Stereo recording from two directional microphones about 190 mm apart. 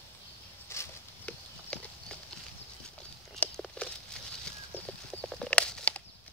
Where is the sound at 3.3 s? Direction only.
5° left (ahead or behind).